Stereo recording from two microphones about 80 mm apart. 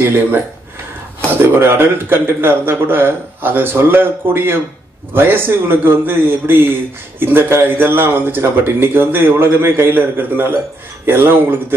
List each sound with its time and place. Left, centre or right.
0.0 s a man's voice: right